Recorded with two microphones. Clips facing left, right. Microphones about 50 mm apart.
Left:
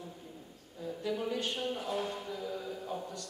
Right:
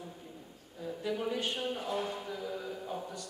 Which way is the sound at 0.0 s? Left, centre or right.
Centre.